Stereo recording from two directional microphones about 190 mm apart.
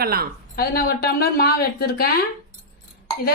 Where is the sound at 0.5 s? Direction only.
55° left (ahead or behind).